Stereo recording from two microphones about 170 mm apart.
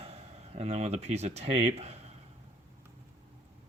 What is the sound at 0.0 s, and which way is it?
Speech, 35° right (ahead or behind).